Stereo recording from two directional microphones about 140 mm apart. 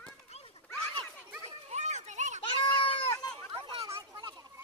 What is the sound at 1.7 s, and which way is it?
Children playing, 55° right (ahead or behind).